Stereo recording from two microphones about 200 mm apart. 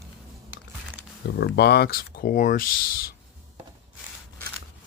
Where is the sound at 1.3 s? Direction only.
55° left (ahead or behind).